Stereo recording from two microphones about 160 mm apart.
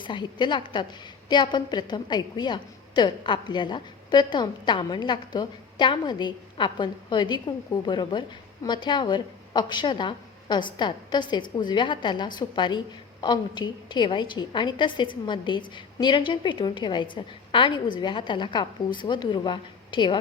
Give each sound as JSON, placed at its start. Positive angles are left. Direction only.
{"t": 0.0, "sound": "a woman's voice", "side_deg": 30}